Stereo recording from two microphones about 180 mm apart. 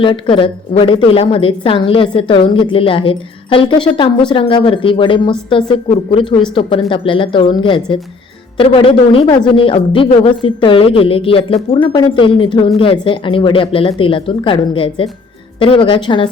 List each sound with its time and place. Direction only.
0.0 s a woman's voice: 30° left (ahead or behind)